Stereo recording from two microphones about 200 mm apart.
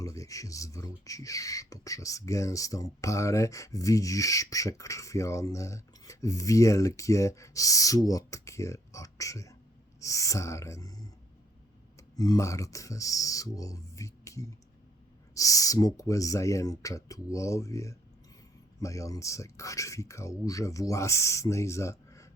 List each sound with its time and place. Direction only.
0.0 s speech: 15° left (ahead or behind)